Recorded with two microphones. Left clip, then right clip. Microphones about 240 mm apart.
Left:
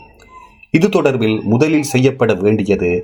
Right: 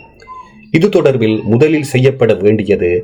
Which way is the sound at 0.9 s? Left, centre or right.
Left.